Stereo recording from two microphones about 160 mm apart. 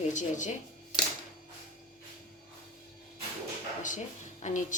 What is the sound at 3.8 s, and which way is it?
Speech, 50° left (ahead or behind).